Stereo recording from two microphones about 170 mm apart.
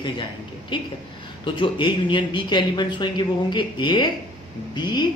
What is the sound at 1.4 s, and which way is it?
Speech, 30° left (ahead or behind).